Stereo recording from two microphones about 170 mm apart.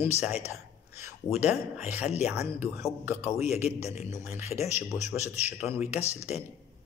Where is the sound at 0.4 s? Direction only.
15° right (ahead or behind).